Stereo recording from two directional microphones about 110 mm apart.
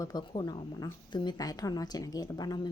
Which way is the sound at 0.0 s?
40° left (ahead or behind).